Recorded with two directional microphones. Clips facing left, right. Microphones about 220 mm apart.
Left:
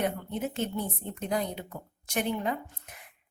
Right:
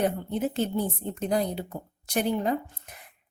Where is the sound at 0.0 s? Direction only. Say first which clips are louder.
Right 4 dB; 35° right (ahead or behind).